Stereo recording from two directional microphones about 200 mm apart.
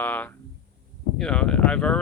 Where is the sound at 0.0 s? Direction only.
10° left (ahead or behind).